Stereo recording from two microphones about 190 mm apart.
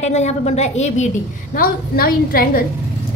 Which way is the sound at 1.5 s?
50° left (ahead or behind).